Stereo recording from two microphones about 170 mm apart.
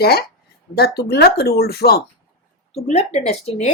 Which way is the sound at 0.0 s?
65° left (ahead or behind).